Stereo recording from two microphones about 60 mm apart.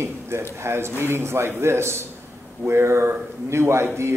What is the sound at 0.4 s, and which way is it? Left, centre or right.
Speech, right.